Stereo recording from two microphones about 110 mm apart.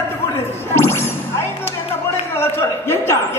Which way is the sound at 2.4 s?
20° left (ahead or behind).